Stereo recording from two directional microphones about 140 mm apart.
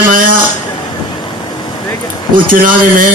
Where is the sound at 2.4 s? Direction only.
75° right (ahead or behind).